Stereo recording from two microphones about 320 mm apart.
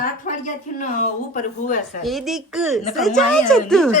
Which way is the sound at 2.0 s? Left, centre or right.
Centre.